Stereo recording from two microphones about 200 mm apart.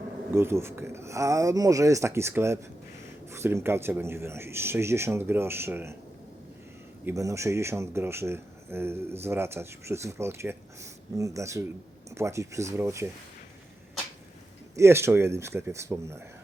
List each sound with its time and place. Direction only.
0.3 s speech: 10° right (ahead or behind)
7.0 s speech: 15° right (ahead or behind)
14.8 s speech: 15° right (ahead or behind)